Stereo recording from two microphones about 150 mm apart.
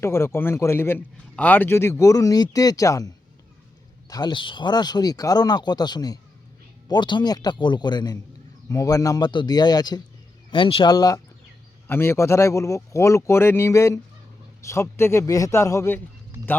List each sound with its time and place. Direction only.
0.0 s a man's voice: 15° left (ahead or behind)
4.1 s a man's voice: 30° left (ahead or behind)